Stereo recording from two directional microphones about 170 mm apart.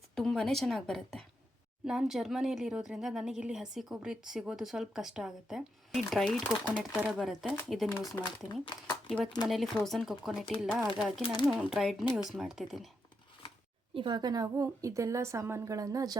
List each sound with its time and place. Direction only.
0.2 s speech: 5° left (ahead or behind)
8.6 s speech: 25° left (ahead or behind)
9.0 s speech: 5° left (ahead or behind)
13.9 s a woman's voice: 25° right (ahead or behind)